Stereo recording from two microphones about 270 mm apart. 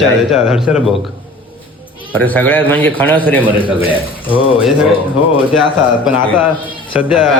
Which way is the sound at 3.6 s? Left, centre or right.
Centre.